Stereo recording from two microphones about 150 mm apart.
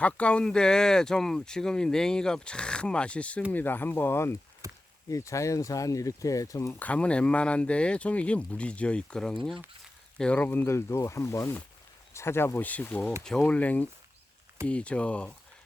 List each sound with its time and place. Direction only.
0.0 s speech: 10° left (ahead or behind)
4.6 s chop: 20° right (ahead or behind)
5.0 s speech: 20° left (ahead or behind)